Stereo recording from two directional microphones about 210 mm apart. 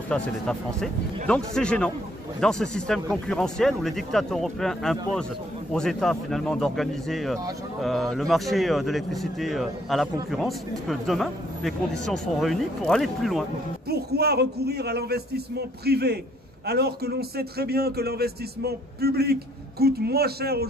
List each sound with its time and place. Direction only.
0.1 s speech: 5° left (ahead or behind)
13.8 s a man's voice: 50° right (ahead or behind)